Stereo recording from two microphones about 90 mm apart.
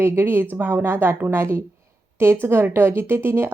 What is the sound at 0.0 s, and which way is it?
Speech, 25° right (ahead or behind).